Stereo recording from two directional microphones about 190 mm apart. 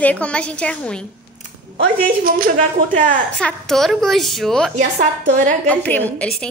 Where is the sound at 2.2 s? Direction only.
45° right (ahead or behind).